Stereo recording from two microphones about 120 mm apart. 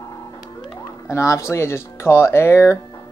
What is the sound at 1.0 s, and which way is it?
Speech, 25° left (ahead or behind).